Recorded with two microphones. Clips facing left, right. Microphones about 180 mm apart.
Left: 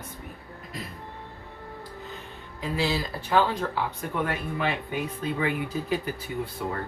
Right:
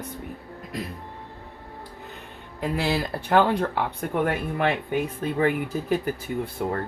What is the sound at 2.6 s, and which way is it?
Speech, 60° right (ahead or behind).